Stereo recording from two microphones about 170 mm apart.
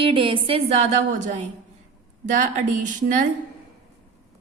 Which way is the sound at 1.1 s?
45° right (ahead or behind).